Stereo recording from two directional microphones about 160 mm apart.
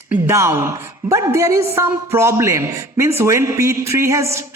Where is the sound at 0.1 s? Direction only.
15° right (ahead or behind).